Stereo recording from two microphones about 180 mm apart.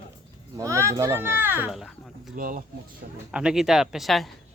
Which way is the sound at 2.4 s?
50° right (ahead or behind).